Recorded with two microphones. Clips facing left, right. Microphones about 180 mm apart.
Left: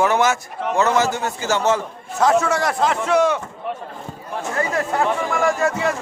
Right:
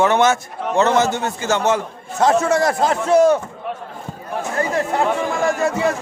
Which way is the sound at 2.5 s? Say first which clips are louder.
Right 3 dB; 40° right (ahead or behind).